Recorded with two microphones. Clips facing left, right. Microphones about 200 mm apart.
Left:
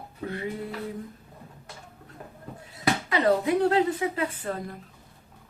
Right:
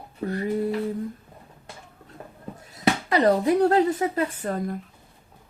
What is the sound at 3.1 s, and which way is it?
A woman's voice, 40° right (ahead or behind).